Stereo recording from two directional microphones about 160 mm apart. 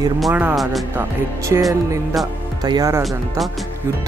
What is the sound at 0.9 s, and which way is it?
Speech, 15° right (ahead or behind).